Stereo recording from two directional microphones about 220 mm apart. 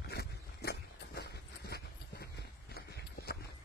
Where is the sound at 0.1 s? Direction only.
45° left (ahead or behind).